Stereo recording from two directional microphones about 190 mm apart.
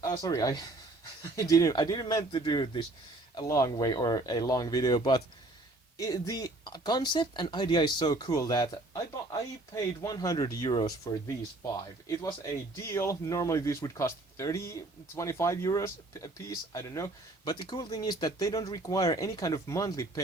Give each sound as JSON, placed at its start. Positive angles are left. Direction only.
{"t": 0.0, "sound": "speech", "side_deg": 20}